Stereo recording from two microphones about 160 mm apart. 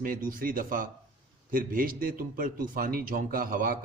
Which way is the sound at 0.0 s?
60° right (ahead or behind).